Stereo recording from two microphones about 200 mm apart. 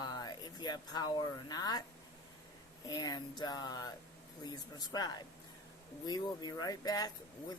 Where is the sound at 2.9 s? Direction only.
20° left (ahead or behind).